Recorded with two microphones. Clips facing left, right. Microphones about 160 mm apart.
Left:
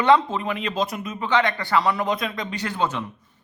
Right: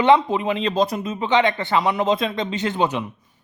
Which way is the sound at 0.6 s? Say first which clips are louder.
Right 5 dB; 35° right (ahead or behind).